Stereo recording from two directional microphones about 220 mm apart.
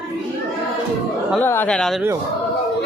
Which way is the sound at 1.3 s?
10° left (ahead or behind).